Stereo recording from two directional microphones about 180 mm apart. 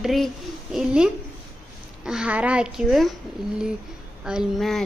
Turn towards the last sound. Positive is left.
turn(degrees=0)  # may be behind; listen again after turning